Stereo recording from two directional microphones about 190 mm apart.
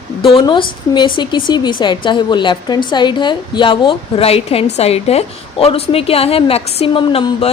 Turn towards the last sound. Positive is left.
turn(degrees=30)  # may be behind; listen again after turning